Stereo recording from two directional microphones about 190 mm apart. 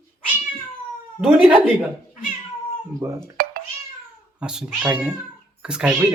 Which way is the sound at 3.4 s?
50° right (ahead or behind).